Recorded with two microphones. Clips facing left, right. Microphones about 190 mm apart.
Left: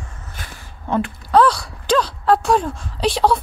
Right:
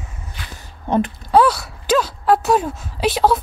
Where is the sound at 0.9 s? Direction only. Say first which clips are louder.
Right 2 dB; 20° right (ahead or behind).